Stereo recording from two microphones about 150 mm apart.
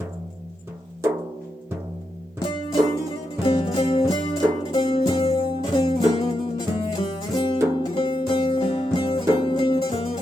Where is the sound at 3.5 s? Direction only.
35° left (ahead or behind).